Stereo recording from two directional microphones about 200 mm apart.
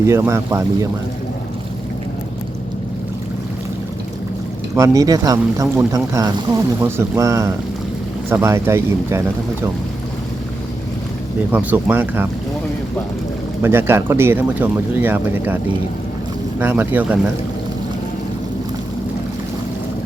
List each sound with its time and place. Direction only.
0.0 s speech: 15° right (ahead or behind)
4.7 s speech: 15° right (ahead or behind)
11.5 s speech: 10° right (ahead or behind)
13.6 s speech: 10° right (ahead or behind)